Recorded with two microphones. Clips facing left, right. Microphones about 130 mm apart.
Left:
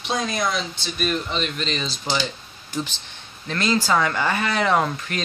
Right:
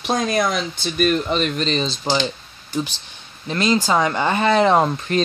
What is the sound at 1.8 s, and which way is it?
Speech, 25° right (ahead or behind).